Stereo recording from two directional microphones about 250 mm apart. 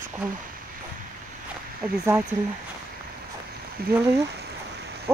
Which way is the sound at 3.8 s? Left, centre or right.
Right.